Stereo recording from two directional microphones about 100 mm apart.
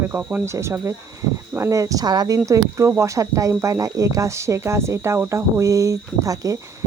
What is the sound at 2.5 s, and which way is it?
Speech, 30° right (ahead or behind).